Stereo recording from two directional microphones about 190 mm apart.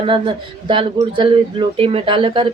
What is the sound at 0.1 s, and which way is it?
Speech, 25° right (ahead or behind).